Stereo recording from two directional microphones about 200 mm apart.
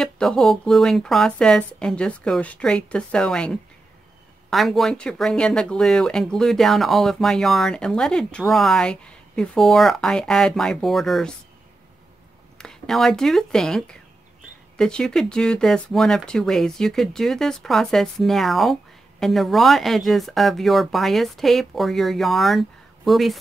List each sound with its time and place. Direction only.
0.0 s speech: centre (ahead or behind)
12.5 s speech: centre (ahead or behind)